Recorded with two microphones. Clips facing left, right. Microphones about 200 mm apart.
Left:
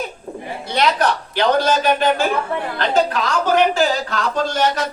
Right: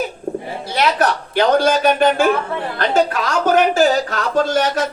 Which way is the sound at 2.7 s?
45° right (ahead or behind).